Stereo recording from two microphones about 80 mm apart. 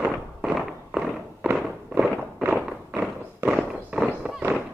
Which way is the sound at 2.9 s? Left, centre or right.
Right.